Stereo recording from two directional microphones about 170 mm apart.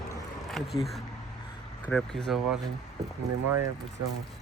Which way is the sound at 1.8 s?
5° left (ahead or behind).